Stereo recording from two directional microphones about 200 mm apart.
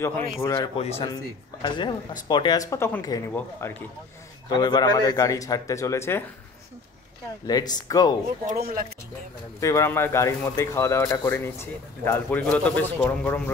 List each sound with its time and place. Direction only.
0.0 s speech: 10° left (ahead or behind)
0.7 s speech: 30° left (ahead or behind); by 6.2 s 10° left (ahead or behind)
7.4 s speech: 20° left (ahead or behind)
8.5 s speech: 45° right (ahead or behind)
9.6 s speech: 15° left (ahead or behind)